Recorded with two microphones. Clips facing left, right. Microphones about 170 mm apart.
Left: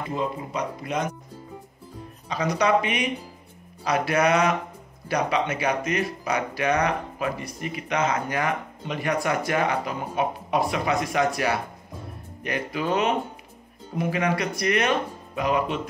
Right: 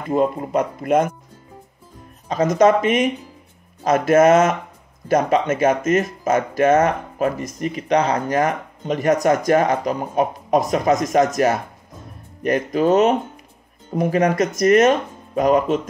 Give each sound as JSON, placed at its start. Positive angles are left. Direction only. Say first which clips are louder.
{"t": 0.1, "sound": "speech", "louder": "right 12 dB", "side_deg": -50}
{"t": 2.2, "sound": "speech", "louder": "right 8 dB", "side_deg": -45}